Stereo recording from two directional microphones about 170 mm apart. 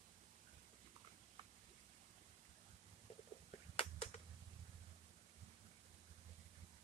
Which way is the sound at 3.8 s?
35° left (ahead or behind).